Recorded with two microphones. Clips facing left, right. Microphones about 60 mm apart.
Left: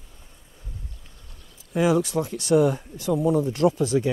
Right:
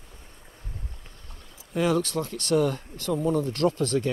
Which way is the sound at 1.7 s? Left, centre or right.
Centre.